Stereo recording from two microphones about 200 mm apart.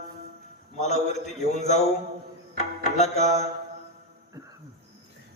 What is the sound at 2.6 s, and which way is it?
Music, 35° left (ahead or behind).